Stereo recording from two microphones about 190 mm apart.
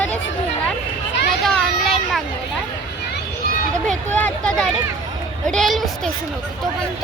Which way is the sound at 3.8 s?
5° left (ahead or behind).